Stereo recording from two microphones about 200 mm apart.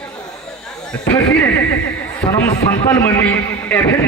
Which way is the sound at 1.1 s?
15° left (ahead or behind).